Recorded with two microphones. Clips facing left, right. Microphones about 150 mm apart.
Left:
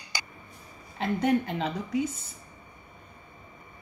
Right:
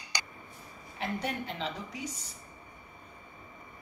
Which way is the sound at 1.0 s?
55° left (ahead or behind).